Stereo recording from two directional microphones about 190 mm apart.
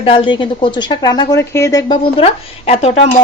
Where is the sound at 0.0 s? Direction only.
30° left (ahead or behind).